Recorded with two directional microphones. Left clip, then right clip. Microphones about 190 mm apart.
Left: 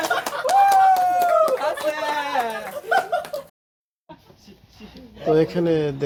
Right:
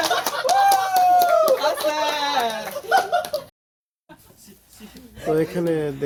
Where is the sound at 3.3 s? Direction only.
60° left (ahead or behind).